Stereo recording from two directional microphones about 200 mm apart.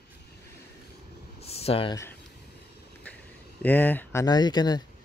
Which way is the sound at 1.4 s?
30° left (ahead or behind).